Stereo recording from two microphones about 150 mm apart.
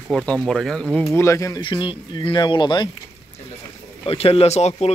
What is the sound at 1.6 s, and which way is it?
Speech, 30° left (ahead or behind).